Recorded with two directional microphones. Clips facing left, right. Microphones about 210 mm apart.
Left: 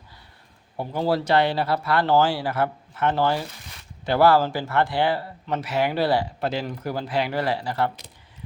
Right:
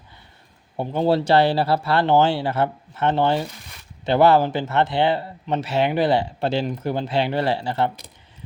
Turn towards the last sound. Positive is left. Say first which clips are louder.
# right 3 dB
turn(degrees=-25)  # may be behind; listen again after turning